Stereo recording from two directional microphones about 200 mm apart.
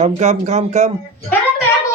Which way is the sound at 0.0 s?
35° right (ahead or behind).